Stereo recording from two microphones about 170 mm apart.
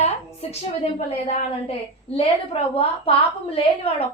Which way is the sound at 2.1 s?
35° left (ahead or behind).